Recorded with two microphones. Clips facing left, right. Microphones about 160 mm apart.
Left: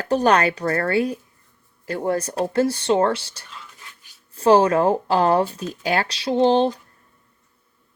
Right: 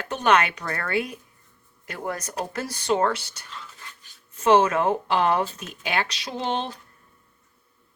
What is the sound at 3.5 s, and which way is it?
Writing, 5° left (ahead or behind).